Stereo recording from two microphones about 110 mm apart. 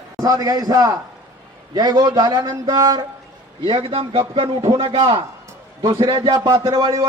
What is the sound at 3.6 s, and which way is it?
A man's voice, 55° right (ahead or behind).